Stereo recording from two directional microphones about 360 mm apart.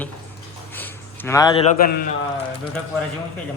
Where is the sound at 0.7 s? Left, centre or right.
Centre.